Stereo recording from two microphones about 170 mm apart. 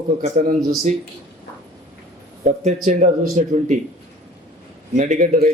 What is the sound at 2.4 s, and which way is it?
Speech, 45° right (ahead or behind).